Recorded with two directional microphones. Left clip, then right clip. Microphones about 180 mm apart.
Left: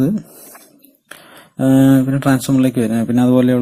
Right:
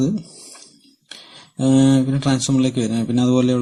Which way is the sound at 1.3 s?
15° left (ahead or behind).